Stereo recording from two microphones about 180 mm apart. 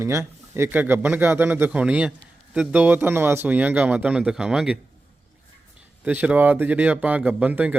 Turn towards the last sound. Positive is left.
turn(degrees=-10)  # may be behind; listen again after turning